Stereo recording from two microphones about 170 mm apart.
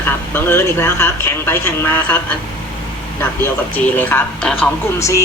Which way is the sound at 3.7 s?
10° left (ahead or behind).